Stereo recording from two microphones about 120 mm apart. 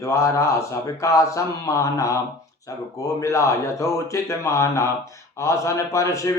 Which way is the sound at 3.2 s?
25° left (ahead or behind).